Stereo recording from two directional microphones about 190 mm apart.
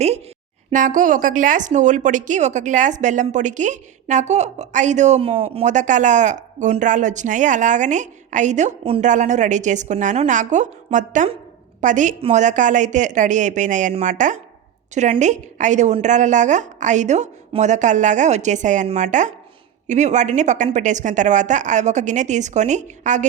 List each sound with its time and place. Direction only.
0.7 s a woman's voice: 45° right (ahead or behind)